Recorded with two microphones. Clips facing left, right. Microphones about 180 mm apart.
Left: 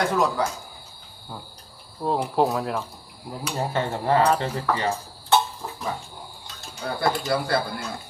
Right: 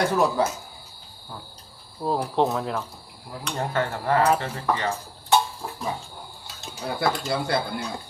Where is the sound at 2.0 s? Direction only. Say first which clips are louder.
Left 1 dB; 5° left (ahead or behind).